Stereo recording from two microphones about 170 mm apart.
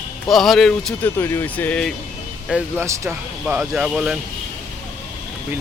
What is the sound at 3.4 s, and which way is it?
Speech, 5° right (ahead or behind).